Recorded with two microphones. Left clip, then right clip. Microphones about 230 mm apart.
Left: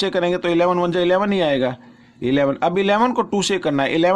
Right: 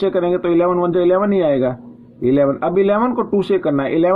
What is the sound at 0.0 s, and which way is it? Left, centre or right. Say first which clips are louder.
Speech: right 3 dB; left.